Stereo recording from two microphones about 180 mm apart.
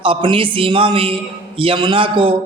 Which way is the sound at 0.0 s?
30° right (ahead or behind).